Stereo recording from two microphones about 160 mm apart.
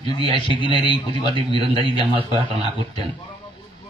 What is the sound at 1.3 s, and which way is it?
A man's voice, 30° right (ahead or behind).